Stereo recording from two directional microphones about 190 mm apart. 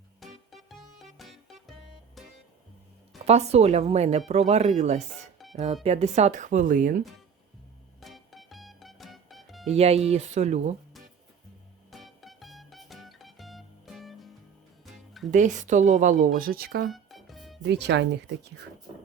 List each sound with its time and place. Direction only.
0.5 s music: centre (ahead or behind)
3.2 s speech: 35° right (ahead or behind)
8.0 s music: centre (ahead or behind)
9.7 s speech: 35° right (ahead or behind)
11.9 s music: centre (ahead or behind)
15.3 s speech: 40° right (ahead or behind)
16.9 s music: centre (ahead or behind)
17.7 s speech: 60° right (ahead or behind)